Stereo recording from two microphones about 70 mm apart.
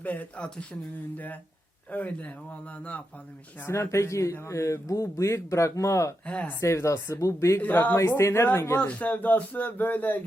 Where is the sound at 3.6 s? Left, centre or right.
Left.